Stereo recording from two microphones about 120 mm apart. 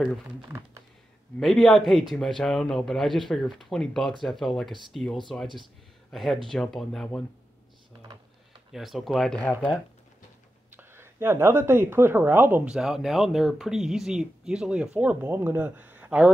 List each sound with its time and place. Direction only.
1.4 s speech: centre (ahead or behind)
8.7 s speech: centre (ahead or behind)
10.8 s a woman's voice: 20° right (ahead or behind)
12.6 s speech: 5° right (ahead or behind)